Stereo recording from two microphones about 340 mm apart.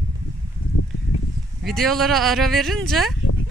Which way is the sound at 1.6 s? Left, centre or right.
Centre.